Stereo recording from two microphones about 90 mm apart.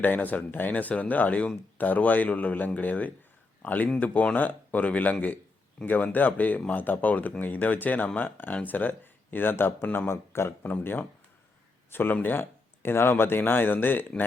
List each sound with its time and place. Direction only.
0.0 s speech: 20° left (ahead or behind)